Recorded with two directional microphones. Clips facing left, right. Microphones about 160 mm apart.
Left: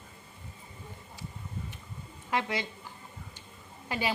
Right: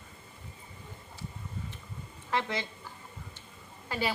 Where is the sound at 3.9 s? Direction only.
15° left (ahead or behind).